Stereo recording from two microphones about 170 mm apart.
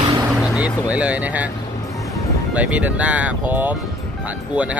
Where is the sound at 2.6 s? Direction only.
10° right (ahead or behind).